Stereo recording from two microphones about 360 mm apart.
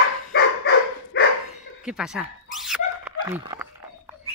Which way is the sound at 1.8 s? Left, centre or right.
Centre.